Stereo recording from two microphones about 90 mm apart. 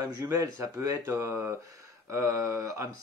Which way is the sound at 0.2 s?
35° right (ahead or behind).